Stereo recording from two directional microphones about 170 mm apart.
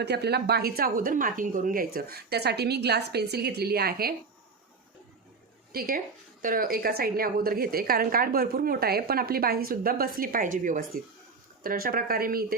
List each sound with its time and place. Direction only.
0.0 s speech: 75° right (ahead or behind)
5.7 s a woman's voice: 60° right (ahead or behind)